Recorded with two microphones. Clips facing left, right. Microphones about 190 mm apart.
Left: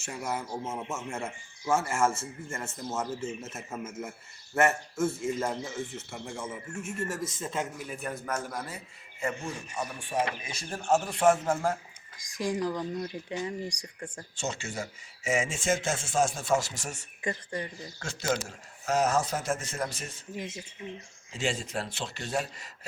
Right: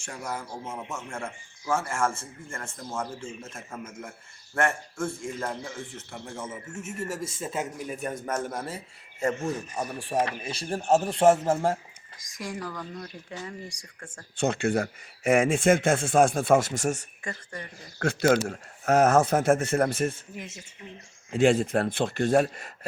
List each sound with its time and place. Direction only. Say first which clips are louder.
0.0 s speech: left 1 dB; 5° left (ahead or behind); by 7.7 s 10° right (ahead or behind)
8.4 s speech: right 4 dB; 30° right (ahead or behind)
12.4 s speech: left 5 dB; 15° left (ahead or behind)
14.3 s speech: right 11 dB; 55° right (ahead or behind)
17.2 s speech: left 4 dB; 20° left (ahead or behind)
18.0 s speech: right 9 dB; 60° right (ahead or behind)
21.3 s speech: right 11 dB; 55° right (ahead or behind)